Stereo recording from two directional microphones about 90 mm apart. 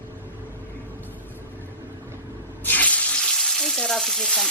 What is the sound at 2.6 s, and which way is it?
Water tap, 20° left (ahead or behind).